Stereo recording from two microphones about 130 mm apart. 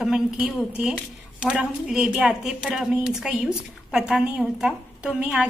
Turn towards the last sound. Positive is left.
turn(degrees=-5)  # may be behind; listen again after turning